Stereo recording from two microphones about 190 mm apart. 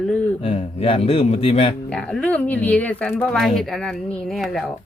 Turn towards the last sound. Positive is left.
turn(degrees=0)  # may be behind; listen again after turning